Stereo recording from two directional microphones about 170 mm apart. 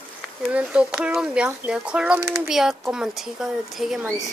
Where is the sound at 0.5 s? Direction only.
5° right (ahead or behind).